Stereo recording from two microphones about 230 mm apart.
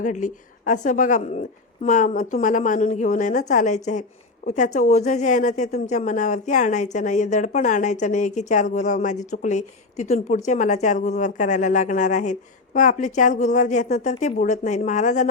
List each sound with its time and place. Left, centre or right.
0.0 s a woman's voice: left